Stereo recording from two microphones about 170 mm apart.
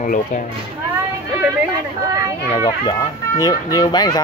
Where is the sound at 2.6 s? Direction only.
25° left (ahead or behind).